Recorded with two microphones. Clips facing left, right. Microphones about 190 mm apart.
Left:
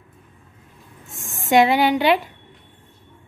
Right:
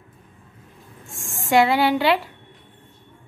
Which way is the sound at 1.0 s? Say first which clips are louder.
Left 2 dB; 20° left (ahead or behind).